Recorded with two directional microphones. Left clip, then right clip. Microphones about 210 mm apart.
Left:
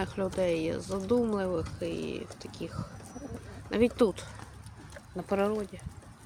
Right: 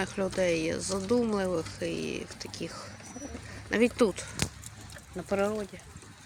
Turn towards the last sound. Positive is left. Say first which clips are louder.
# even
turn(degrees=15)  # may be behind; listen again after turning